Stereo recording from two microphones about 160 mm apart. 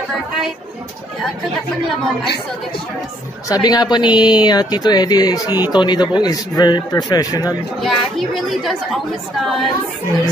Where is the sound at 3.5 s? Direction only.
25° left (ahead or behind).